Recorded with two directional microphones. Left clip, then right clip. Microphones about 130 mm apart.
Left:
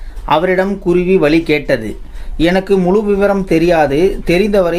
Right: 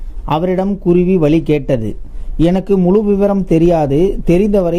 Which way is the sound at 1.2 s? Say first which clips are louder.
Left 1 dB; 60° right (ahead or behind).